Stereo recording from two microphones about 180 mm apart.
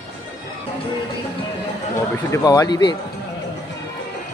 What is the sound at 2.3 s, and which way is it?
Speech, 20° left (ahead or behind).